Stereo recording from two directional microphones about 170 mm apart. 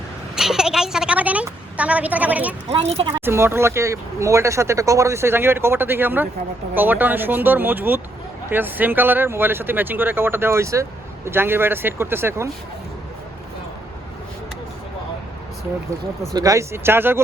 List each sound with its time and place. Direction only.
0.3 s a sound: 5° right (ahead or behind)
2.6 s speech: 35° right (ahead or behind)
3.1 s speech: 15° right (ahead or behind)
16.3 s speech: 20° right (ahead or behind)